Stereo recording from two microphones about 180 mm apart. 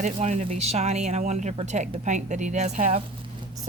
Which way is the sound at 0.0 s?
40° right (ahead or behind).